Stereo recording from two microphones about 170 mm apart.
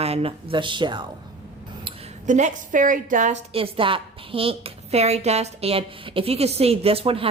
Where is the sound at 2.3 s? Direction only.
45° right (ahead or behind).